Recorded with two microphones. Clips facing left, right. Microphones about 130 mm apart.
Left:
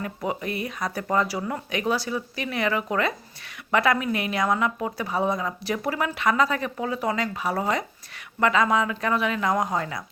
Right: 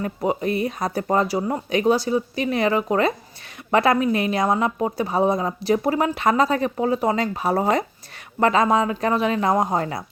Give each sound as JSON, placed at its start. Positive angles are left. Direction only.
{"t": 0.0, "sound": "a woman's voice", "side_deg": -30}